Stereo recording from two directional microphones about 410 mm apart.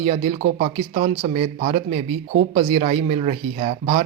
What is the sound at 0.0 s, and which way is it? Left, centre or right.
Speech, centre.